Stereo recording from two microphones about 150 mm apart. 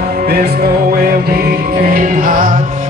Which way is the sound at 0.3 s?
70° right (ahead or behind).